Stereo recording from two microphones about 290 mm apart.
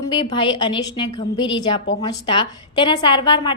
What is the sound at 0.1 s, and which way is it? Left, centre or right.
A woman's voice, centre.